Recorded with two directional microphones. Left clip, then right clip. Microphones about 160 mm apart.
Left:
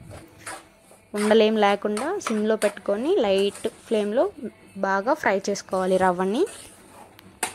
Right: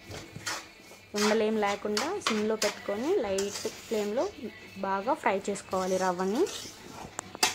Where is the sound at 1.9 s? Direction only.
35° left (ahead or behind).